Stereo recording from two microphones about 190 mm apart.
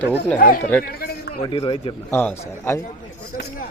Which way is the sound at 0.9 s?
55° left (ahead or behind).